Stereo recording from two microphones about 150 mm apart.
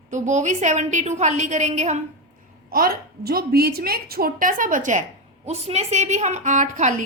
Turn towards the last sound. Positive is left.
turn(degrees=-55)  # may be behind; listen again after turning